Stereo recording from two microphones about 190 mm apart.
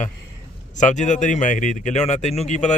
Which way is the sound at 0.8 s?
40° left (ahead or behind).